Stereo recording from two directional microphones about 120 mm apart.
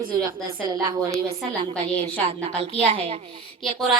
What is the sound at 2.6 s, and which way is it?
Speech, 55° right (ahead or behind).